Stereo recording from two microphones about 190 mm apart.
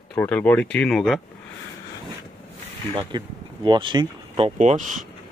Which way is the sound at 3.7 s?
25° right (ahead or behind).